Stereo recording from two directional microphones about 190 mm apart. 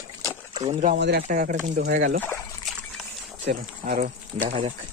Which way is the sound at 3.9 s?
45° right (ahead or behind).